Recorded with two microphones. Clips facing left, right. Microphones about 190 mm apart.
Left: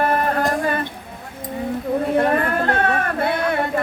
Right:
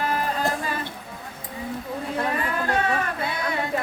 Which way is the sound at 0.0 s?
60° left (ahead or behind).